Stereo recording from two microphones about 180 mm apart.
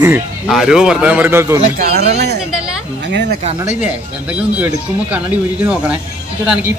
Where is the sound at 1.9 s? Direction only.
65° right (ahead or behind).